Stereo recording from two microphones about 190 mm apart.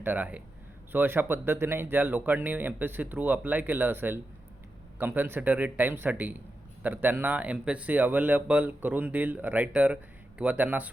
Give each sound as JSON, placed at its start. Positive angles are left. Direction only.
{"t": 0.0, "sound": "speech", "side_deg": -10}